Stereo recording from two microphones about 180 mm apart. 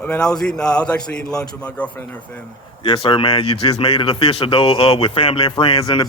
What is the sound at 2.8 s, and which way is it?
A man's voice, 30° left (ahead or behind).